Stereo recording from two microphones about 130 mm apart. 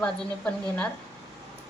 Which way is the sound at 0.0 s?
10° left (ahead or behind).